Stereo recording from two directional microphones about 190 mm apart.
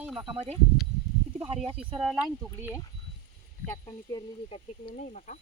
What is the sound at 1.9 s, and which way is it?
Speech, 5° right (ahead or behind).